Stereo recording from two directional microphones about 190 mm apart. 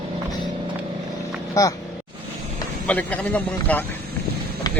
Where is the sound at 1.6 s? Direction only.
20° left (ahead or behind).